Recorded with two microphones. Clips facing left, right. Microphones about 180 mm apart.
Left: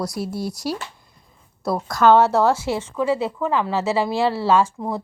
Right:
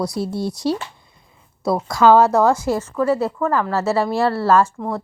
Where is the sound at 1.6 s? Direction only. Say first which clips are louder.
Right 2 dB; centre (ahead or behind).